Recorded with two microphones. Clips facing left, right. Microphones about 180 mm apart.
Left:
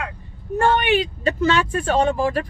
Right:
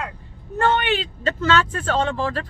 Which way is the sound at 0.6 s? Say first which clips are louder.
Left 2 dB; 15° left (ahead or behind).